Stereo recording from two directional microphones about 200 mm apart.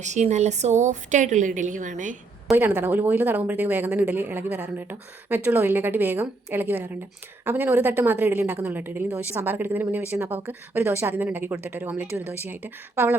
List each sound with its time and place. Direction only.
0.0 s a woman's voice: 35° right (ahead or behind)
2.5 s speech: 10° right (ahead or behind)